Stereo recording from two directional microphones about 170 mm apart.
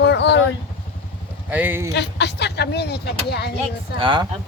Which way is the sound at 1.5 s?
10° right (ahead or behind).